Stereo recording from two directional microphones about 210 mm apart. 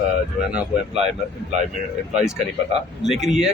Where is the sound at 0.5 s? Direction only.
Centre (ahead or behind).